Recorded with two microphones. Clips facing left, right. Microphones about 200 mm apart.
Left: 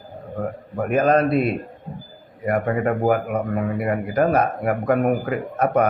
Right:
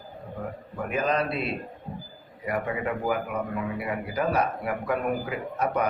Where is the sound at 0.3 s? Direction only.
55° left (ahead or behind).